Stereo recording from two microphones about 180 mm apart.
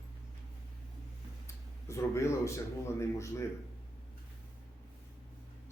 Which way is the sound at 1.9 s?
15° left (ahead or behind).